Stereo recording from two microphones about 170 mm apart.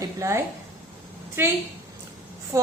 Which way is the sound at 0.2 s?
15° right (ahead or behind).